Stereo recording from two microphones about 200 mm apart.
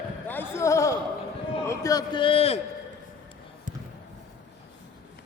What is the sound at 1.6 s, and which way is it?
Speech, 15° left (ahead or behind).